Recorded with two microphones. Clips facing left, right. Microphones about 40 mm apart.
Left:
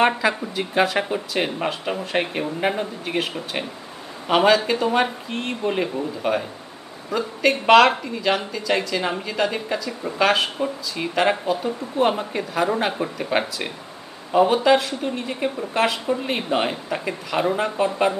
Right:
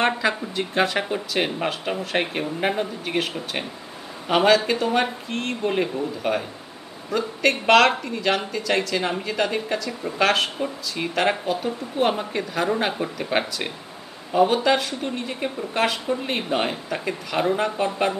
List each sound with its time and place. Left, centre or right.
0.0 s a woman's voice: centre
2.2 s speech: centre
2.6 s a woman's voice: centre